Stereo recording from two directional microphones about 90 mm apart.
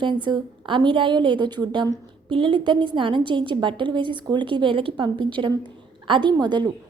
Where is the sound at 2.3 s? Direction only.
70° right (ahead or behind).